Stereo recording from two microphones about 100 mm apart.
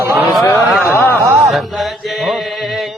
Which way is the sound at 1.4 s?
Centre (ahead or behind).